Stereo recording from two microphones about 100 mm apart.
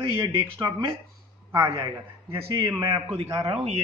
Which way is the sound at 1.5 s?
35° right (ahead or behind).